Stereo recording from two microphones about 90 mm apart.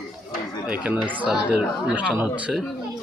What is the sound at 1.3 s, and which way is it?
Speech, 15° right (ahead or behind).